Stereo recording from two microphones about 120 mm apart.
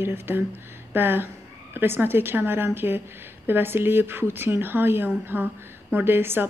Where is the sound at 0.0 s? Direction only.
20° right (ahead or behind).